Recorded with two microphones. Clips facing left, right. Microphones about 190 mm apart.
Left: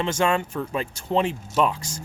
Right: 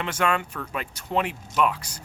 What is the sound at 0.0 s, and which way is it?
Speech, 25° left (ahead or behind).